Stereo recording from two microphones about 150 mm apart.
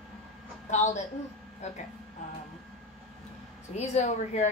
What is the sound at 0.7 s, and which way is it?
A woman's voice, 50° left (ahead or behind).